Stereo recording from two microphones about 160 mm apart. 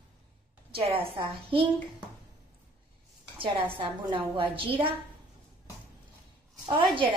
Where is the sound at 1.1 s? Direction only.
35° right (ahead or behind).